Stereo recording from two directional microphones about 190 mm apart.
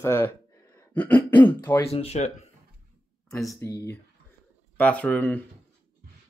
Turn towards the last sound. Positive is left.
turn(degrees=10)  # may be behind; listen again after turning